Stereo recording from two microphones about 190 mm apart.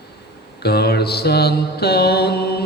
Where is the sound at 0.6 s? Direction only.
55° left (ahead or behind).